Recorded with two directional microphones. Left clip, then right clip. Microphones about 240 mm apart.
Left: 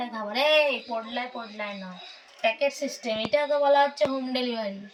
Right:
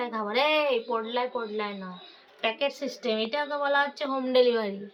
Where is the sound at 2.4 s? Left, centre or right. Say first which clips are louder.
Left 3 dB; centre.